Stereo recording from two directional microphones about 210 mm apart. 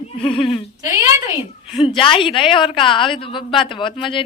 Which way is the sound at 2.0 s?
25° left (ahead or behind).